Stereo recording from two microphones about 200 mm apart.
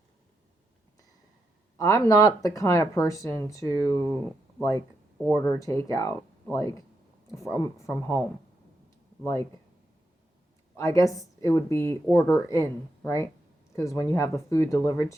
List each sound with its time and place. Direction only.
1.8 s speech: 15° left (ahead or behind)
5.3 s speech: 15° left (ahead or behind)
10.8 s speech: 15° left (ahead or behind)